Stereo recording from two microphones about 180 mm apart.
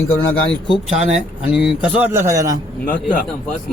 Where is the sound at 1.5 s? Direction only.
5° right (ahead or behind).